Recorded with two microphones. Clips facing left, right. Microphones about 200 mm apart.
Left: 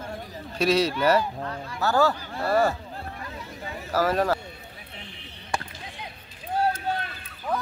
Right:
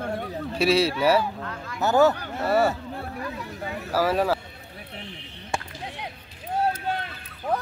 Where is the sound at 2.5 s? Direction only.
5° right (ahead or behind).